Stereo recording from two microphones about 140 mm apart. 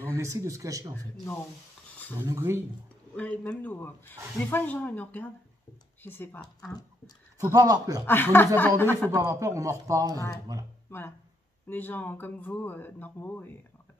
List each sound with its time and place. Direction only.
0.1 s speech: 20° right (ahead or behind)
2.2 s speech: 20° right (ahead or behind)
3.2 s speech: 10° left (ahead or behind)
7.3 s speech: 25° right (ahead or behind)
8.1 s speech: 15° left (ahead or behind)
9.1 s speech: 20° right (ahead or behind)
10.9 s speech: 15° left (ahead or behind)